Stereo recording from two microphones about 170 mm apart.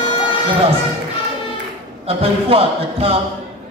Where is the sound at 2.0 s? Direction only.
35° right (ahead or behind).